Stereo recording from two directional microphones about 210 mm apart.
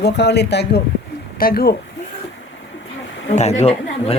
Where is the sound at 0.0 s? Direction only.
55° left (ahead or behind).